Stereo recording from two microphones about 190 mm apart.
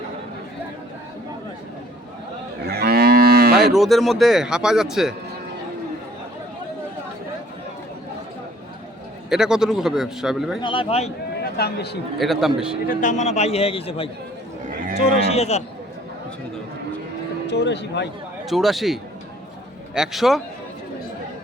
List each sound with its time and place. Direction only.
2.6 s moo: 55° right (ahead or behind)
3.7 s speech: centre (ahead or behind)
9.3 s speech: 5° right (ahead or behind)
10.6 s a man's voice: 25° left (ahead or behind)
11.5 s speech: 60° left (ahead or behind)
12.1 s speech: centre (ahead or behind)
12.9 s a man's voice: 40° left (ahead or behind)
15.3 s a man's voice: 35° left (ahead or behind)
17.4 s speech: 65° left (ahead or behind)
18.4 s speech: centre (ahead or behind)